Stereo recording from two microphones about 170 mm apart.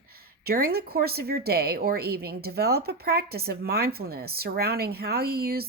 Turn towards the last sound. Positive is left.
turn(degrees=-65)  # may be behind; listen again after turning